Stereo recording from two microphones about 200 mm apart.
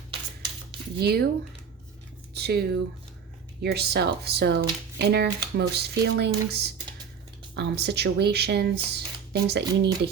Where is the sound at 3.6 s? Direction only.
55° right (ahead or behind).